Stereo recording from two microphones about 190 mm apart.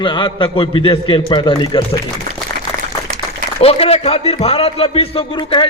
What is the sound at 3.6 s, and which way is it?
Speech, 30° left (ahead or behind).